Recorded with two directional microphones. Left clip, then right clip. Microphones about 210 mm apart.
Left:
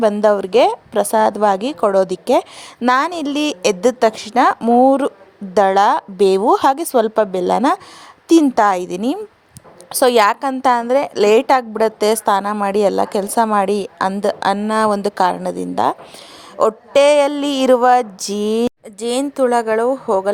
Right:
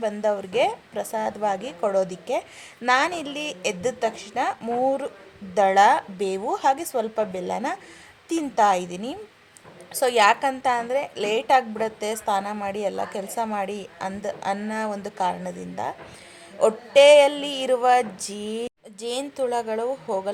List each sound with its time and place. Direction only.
0.0 s a woman's voice: 35° left (ahead or behind)